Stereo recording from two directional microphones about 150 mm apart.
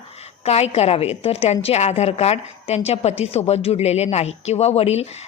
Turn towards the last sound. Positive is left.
turn(degrees=45)  # may be behind; listen again after turning